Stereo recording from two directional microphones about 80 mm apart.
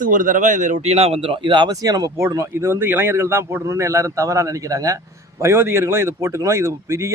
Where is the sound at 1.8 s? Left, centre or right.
Right.